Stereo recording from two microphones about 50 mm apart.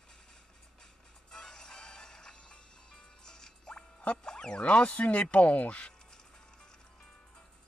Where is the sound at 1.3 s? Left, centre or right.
Centre; by 5.2 s left.